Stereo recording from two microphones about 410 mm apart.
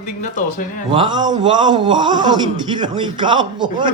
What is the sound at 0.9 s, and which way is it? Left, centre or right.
A man's voice, centre.